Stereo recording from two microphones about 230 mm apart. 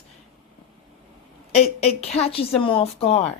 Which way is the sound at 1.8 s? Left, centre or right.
Left.